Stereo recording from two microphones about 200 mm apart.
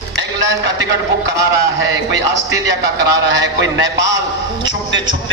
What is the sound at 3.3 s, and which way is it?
Speech, 65° right (ahead or behind).